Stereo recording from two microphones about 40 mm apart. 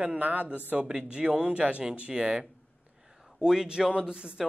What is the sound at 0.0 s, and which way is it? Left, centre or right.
Speech, right.